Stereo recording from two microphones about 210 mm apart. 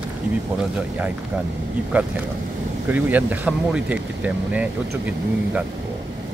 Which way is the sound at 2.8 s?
10° right (ahead or behind).